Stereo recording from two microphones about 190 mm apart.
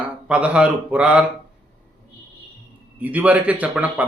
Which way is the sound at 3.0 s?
10° right (ahead or behind).